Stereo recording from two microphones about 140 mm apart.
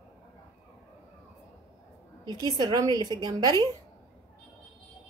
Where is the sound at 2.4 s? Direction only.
30° right (ahead or behind).